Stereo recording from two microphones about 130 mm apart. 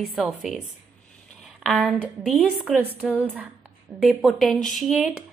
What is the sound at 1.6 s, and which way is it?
Speech, centre (ahead or behind).